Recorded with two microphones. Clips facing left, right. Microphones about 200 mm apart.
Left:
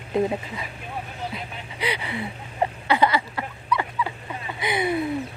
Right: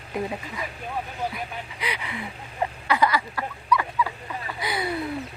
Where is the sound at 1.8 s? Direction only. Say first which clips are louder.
Left 6 dB; 30° left (ahead or behind).